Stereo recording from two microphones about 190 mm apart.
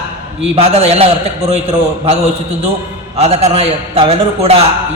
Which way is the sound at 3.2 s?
35° right (ahead or behind).